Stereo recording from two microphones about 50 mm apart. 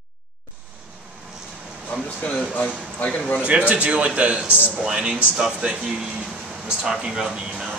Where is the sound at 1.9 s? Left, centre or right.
Left.